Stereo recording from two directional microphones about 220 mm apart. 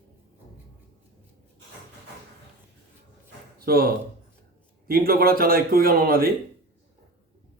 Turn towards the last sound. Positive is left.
turn(degrees=-45)  # may be behind; listen again after turning